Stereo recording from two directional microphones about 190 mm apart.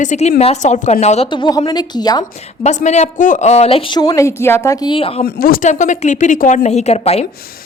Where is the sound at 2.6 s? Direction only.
35° left (ahead or behind).